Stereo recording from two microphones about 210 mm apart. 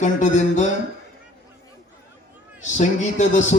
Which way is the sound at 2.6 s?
35° left (ahead or behind).